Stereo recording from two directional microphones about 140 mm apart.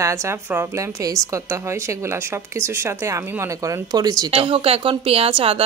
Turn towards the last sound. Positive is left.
turn(degrees=-40)  # may be behind; listen again after turning